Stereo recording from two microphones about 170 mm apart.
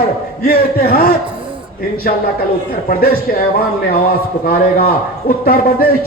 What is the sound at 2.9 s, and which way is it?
Speech, 60° left (ahead or behind).